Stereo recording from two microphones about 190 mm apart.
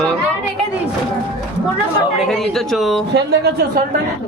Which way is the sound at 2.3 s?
Centre (ahead or behind).